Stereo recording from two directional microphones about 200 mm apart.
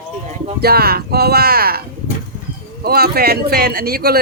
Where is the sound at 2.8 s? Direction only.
50° right (ahead or behind).